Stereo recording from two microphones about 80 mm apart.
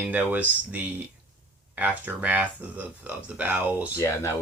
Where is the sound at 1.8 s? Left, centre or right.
Right.